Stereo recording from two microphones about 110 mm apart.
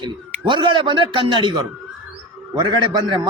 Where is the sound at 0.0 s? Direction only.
45° right (ahead or behind).